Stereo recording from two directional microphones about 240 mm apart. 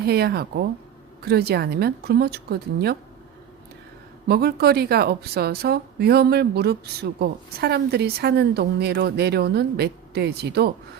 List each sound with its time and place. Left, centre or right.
0.0 s a woman's voice: right
4.3 s a woman's voice: right